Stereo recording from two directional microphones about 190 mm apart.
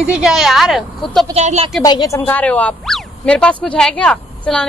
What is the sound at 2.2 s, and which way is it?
Speech, 10° left (ahead or behind).